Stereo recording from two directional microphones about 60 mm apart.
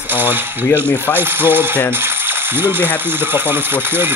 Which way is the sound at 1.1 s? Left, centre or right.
Right.